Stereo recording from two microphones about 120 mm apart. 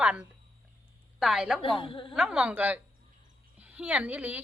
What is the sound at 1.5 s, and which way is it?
Speech, 45° left (ahead or behind).